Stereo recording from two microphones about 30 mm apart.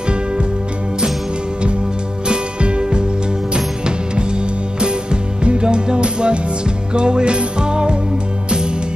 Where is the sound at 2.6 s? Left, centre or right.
Right.